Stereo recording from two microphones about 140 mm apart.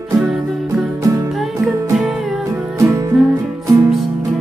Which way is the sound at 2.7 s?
25° right (ahead or behind).